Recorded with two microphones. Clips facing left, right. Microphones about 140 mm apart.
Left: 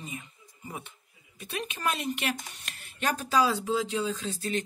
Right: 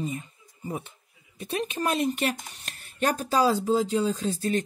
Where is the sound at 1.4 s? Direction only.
35° right (ahead or behind).